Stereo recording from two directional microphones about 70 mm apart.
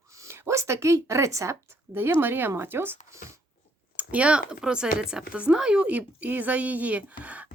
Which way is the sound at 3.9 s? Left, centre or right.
Centre.